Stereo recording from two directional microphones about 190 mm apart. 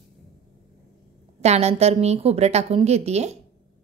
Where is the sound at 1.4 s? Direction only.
35° right (ahead or behind).